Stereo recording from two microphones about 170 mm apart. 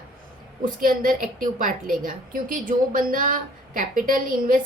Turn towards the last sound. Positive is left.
turn(degrees=-55)  # may be behind; listen again after turning